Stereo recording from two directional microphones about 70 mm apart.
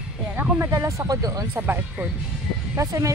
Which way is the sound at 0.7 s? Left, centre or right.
Right.